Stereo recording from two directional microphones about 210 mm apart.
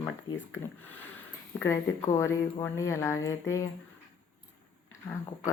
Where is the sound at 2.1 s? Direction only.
15° left (ahead or behind).